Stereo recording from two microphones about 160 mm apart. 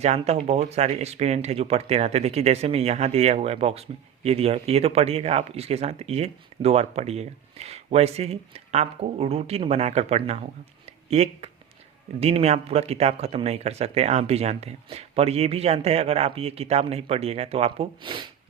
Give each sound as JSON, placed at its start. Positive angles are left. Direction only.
{"t": 0.0, "sound": "speech", "side_deg": -45}